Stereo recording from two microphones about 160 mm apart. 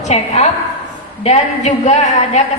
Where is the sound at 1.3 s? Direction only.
45° left (ahead or behind).